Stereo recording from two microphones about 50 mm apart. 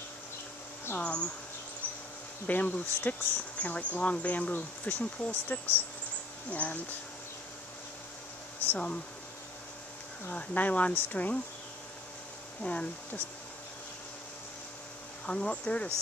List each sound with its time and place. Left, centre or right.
0.9 s speech: left
2.4 s speech: left
8.6 s speech: left
10.3 s speech: left
12.6 s speech: left
15.2 s speech: centre